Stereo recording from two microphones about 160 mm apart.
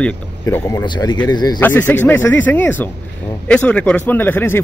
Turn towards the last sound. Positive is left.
turn(degrees=15)  # may be behind; listen again after turning